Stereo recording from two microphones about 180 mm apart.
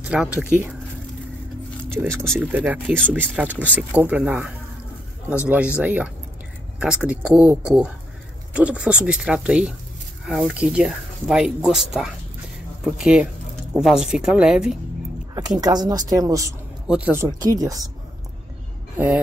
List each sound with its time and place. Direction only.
0.0 s speech: 5° right (ahead or behind)
2.0 s speech: 15° right (ahead or behind)
15.6 s speech: 20° right (ahead or behind)
16.8 s speech: 5° right (ahead or behind)
18.9 s speech: 5° right (ahead or behind)